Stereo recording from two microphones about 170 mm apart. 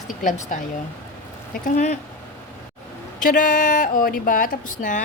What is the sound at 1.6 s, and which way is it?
Speech, 45° left (ahead or behind).